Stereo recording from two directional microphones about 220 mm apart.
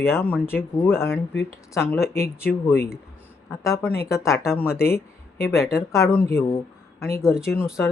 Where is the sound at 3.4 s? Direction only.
10° left (ahead or behind).